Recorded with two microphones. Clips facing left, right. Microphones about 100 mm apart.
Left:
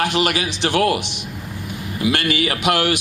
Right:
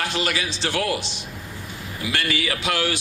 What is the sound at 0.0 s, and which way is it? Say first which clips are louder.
A man's voice: left 6 dB; 60° left (ahead or behind).